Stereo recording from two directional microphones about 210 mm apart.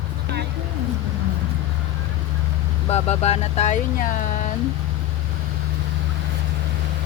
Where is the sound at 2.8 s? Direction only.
30° left (ahead or behind).